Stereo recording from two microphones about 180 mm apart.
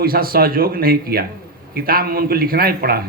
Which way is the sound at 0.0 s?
55° right (ahead or behind).